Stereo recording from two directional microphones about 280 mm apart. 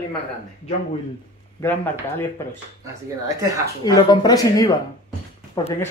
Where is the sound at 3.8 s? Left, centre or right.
Centre.